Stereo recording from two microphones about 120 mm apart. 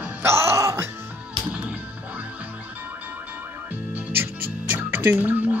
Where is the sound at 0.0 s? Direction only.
20° right (ahead or behind).